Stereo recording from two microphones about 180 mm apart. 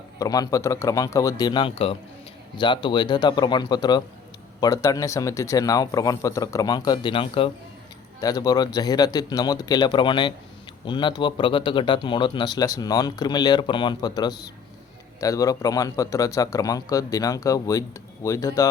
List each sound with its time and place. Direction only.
0.2 s speech: 20° left (ahead or behind)
15.2 s speech: 20° left (ahead or behind)